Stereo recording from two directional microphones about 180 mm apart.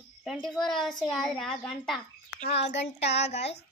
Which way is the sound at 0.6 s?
Centre (ahead or behind).